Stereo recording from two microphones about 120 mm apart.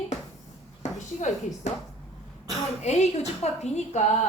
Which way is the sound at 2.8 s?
70° left (ahead or behind).